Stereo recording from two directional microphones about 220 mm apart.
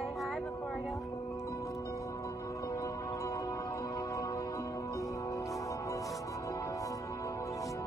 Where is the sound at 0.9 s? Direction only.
15° left (ahead or behind).